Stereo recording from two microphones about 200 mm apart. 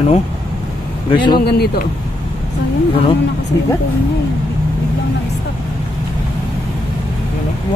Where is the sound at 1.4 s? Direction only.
55° left (ahead or behind).